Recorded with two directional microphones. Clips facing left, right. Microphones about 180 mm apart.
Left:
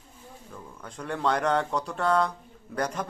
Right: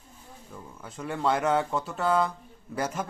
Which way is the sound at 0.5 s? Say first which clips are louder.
Even; 5° right (ahead or behind).